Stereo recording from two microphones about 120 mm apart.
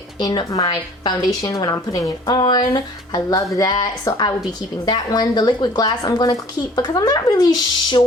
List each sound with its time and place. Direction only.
0.2 s a woman's voice: 35° left (ahead or behind)